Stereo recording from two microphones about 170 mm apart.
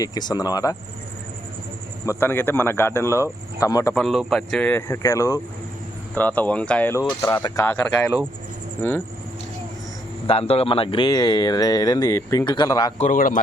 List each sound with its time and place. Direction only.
0.0 s speech: 25° left (ahead or behind)
2.0 s speech: 15° left (ahead or behind)
3.9 s speech: centre (ahead or behind)
7.2 s speech: 20° left (ahead or behind)
8.8 s speech: 10° left (ahead or behind)
10.2 s speech: 35° left (ahead or behind)
13.0 s a man's voice: 50° left (ahead or behind)